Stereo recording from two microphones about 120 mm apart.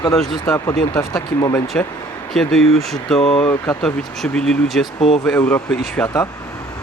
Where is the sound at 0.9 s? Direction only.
25° left (ahead or behind).